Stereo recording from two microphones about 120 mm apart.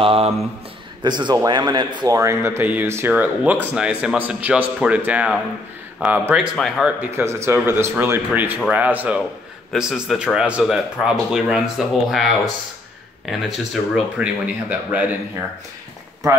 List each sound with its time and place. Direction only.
0.0 s speech: 50° right (ahead or behind)
1.0 s speech: 35° right (ahead or behind)
2.1 s speech: 25° right (ahead or behind); by 6.9 s 5° right (ahead or behind)
7.0 s speech: 20° right (ahead or behind)